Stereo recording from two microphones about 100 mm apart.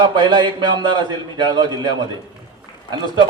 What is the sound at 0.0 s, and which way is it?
A man's voice, 50° right (ahead or behind).